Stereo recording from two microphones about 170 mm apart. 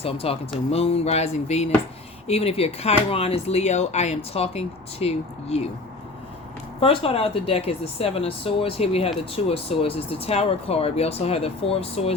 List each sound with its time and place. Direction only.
0.0 s speech: 35° left (ahead or behind)
6.7 s speech: 35° left (ahead or behind)